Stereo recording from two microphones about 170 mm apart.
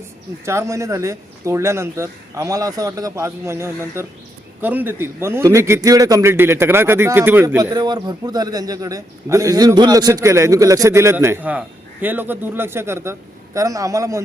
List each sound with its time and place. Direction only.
0.4 s a man's voice: 15° right (ahead or behind)